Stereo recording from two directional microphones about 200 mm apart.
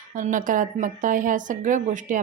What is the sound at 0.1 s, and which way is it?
Speech, 40° right (ahead or behind).